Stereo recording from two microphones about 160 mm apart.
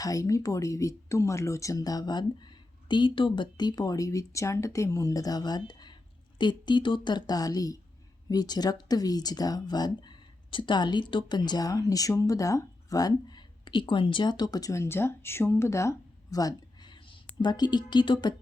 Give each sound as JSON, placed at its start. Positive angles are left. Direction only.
{"t": 0.0, "sound": "speech", "side_deg": 20}